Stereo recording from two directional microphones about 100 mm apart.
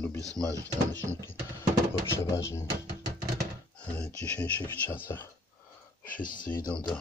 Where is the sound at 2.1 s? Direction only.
30° left (ahead or behind).